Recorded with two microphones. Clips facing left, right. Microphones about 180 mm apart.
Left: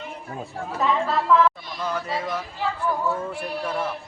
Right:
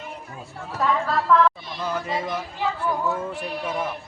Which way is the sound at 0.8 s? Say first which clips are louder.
Even; centre (ahead or behind).